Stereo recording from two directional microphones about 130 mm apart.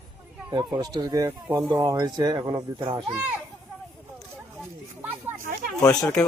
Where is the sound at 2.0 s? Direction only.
30° right (ahead or behind).